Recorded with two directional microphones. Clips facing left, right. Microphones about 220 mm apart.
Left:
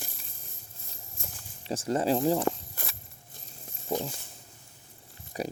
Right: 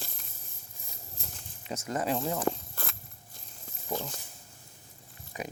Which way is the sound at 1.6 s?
30° left (ahead or behind).